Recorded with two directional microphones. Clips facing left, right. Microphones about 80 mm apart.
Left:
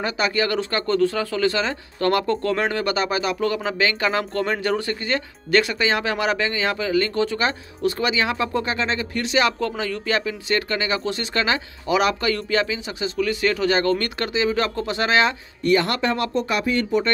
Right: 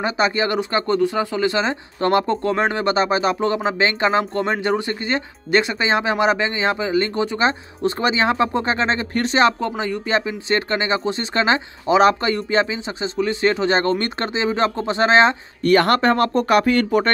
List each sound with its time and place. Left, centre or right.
0.0 s speech: right
15.6 s speech: right